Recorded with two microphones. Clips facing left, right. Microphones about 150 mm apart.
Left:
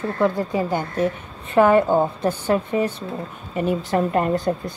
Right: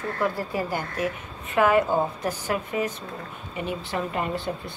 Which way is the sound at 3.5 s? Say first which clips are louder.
Left 8 dB; 45° left (ahead or behind).